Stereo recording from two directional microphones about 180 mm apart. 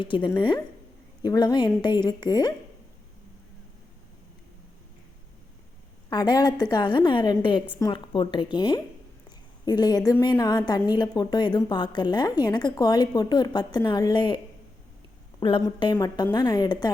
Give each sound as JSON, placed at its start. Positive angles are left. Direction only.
{"t": 0.0, "sound": "a woman's voice", "side_deg": 25}
{"t": 6.1, "sound": "a woman's voice", "side_deg": 25}